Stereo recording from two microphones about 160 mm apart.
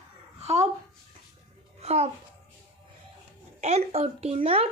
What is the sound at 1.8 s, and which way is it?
Music, 40° right (ahead or behind).